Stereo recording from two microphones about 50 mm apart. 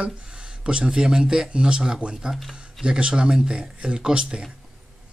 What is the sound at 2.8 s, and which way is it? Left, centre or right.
Speech, centre.